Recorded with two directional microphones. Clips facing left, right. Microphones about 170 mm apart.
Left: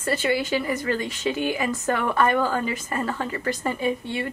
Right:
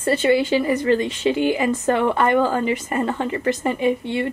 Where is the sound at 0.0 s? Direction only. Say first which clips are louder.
Right 6 dB; 25° right (ahead or behind).